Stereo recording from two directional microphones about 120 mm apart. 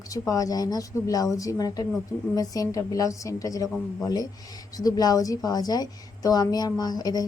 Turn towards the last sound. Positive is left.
turn(degrees=35)  # may be behind; listen again after turning